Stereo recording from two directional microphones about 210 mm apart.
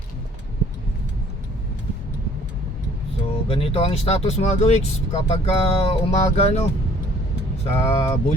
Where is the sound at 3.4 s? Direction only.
25° left (ahead or behind).